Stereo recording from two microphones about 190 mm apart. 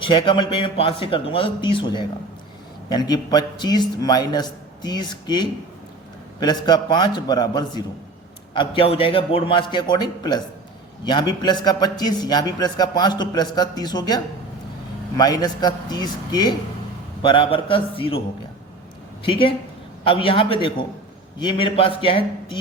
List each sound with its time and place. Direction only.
0.0 s a man's voice: 25° left (ahead or behind)
15.2 s a man's voice: 20° left (ahead or behind)
19.2 s a man's voice: 25° left (ahead or behind)